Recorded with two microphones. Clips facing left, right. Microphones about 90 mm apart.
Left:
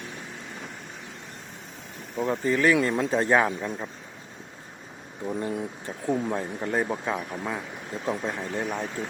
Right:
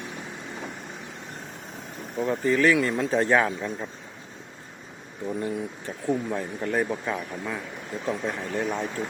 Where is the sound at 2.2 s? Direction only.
20° left (ahead or behind).